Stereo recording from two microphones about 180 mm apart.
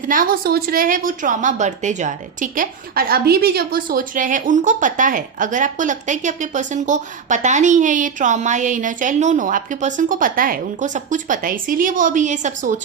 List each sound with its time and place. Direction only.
0.1 s a woman's voice: 50° right (ahead or behind)